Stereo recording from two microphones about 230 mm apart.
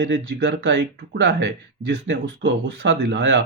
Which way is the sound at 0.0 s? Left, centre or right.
Right.